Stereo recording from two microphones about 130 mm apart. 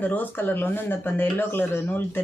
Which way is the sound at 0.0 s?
15° left (ahead or behind).